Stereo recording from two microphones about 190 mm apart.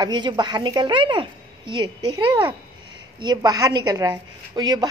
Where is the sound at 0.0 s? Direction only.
25° right (ahead or behind).